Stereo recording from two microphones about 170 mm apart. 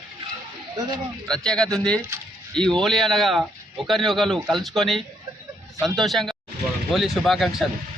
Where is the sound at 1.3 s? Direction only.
5° left (ahead or behind).